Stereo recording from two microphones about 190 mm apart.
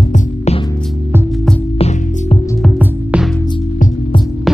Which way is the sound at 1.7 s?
30° left (ahead or behind).